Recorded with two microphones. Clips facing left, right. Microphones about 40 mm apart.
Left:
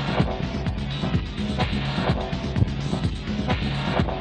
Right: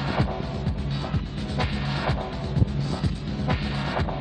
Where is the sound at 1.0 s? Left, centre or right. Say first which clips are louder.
Left 4 dB; left.